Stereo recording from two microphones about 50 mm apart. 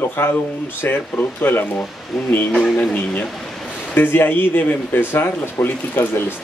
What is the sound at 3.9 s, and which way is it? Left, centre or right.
Speech, left.